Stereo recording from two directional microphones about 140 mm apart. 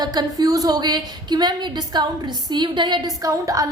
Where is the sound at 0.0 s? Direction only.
30° right (ahead or behind).